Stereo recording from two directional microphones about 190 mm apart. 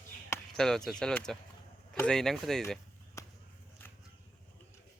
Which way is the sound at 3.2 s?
15° left (ahead or behind).